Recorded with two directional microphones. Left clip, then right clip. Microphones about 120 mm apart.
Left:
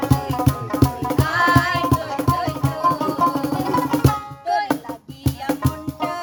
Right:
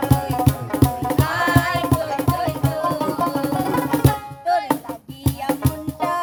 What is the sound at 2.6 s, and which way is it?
Music, 20° left (ahead or behind).